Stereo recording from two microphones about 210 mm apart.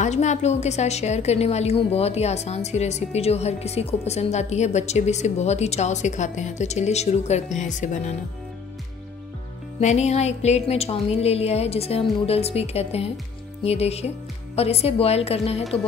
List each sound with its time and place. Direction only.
0.0 s a woman's voice: 35° left (ahead or behind)
9.8 s a woman's voice: 35° left (ahead or behind)